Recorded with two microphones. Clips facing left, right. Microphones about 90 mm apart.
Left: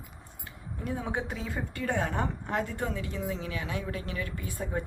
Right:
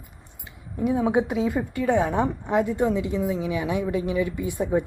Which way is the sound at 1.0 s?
10° right (ahead or behind).